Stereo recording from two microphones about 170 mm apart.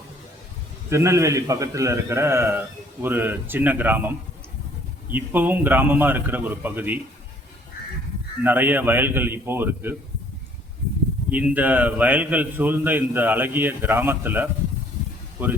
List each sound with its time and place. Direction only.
0.9 s a man's voice: 15° right (ahead or behind)
5.1 s a man's voice: 10° right (ahead or behind)
8.4 s a man's voice: 10° right (ahead or behind)
11.3 s a man's voice: 10° right (ahead or behind)